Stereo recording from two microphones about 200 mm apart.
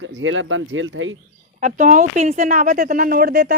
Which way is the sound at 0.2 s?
75° right (ahead or behind).